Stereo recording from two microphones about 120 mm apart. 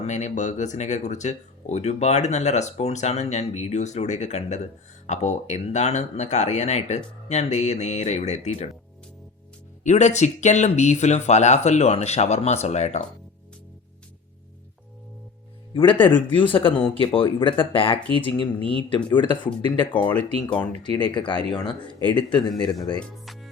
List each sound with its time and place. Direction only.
0.0 s speech: 75° left (ahead or behind)
9.8 s speech: 75° left (ahead or behind)
15.7 s speech: 45° left (ahead or behind)
23.0 s music: centre (ahead or behind)